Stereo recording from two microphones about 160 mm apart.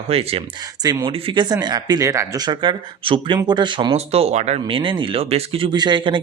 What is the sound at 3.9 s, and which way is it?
Speech, 40° right (ahead or behind).